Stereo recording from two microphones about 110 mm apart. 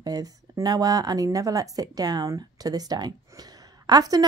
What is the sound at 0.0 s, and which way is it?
Speech, 35° right (ahead or behind).